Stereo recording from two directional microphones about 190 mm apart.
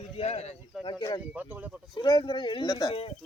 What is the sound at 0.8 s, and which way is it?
Speech, 20° left (ahead or behind).